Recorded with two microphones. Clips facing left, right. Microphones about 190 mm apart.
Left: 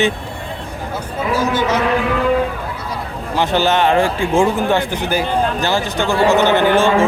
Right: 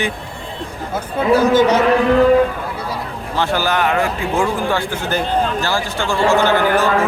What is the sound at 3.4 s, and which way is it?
Speech, 25° left (ahead or behind).